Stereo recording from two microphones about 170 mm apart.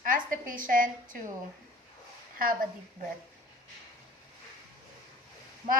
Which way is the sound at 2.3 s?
55° right (ahead or behind).